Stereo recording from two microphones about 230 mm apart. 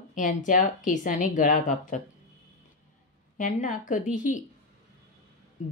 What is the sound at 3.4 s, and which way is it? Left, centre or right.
A woman's voice, left.